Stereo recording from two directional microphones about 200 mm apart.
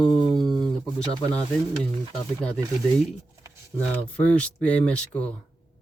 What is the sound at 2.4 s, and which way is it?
Speech, 5° left (ahead or behind).